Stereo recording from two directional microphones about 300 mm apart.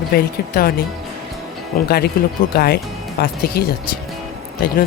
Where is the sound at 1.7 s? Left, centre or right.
Left.